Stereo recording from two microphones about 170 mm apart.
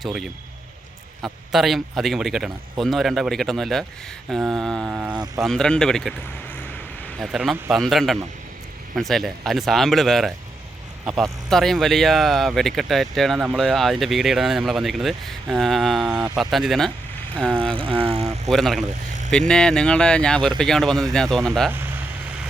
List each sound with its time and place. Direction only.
0.0 s speech: centre (ahead or behind)
7.2 s speech: 5° right (ahead or behind)
17.6 s vehicle: 30° right (ahead or behind)
18.4 s speech: centre (ahead or behind)
21.7 s speech: 10° right (ahead or behind)